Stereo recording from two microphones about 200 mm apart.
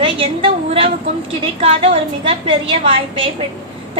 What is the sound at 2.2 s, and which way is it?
A woman's voice, 25° right (ahead or behind).